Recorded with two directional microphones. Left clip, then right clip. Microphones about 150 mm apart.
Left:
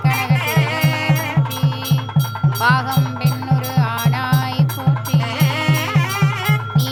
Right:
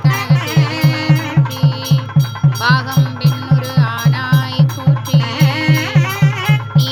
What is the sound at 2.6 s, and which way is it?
Music, 15° left (ahead or behind).